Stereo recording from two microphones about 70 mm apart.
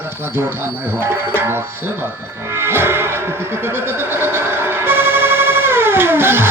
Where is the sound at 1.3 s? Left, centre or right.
Right.